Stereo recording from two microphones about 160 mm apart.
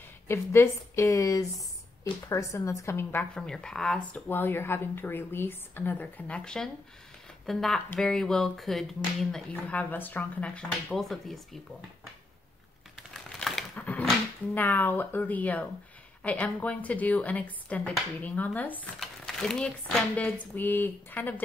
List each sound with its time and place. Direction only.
0.3 s a woman's voice: 15° left (ahead or behind)
13.1 s a sound: centre (ahead or behind)
16.2 s a woman's voice: 10° left (ahead or behind)